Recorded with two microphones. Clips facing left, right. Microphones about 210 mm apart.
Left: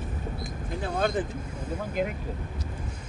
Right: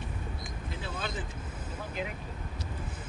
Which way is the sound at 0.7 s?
50° left (ahead or behind).